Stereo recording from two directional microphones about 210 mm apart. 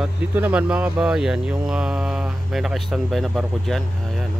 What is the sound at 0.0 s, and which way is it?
Speech, 10° right (ahead or behind).